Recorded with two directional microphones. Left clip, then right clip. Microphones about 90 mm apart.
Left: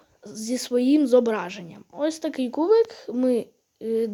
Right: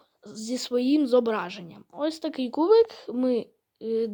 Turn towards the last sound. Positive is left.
turn(degrees=-15)  # may be behind; listen again after turning